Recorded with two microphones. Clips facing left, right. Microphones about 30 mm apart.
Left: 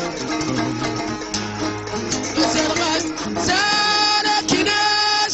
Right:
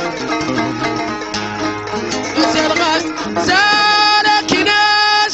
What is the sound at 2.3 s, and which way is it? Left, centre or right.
Music, right.